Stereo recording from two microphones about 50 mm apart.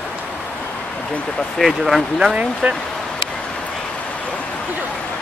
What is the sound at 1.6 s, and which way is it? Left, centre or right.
Speech, centre.